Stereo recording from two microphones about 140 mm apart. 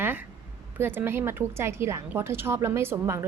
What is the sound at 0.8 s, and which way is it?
A woman's voice, 15° right (ahead or behind).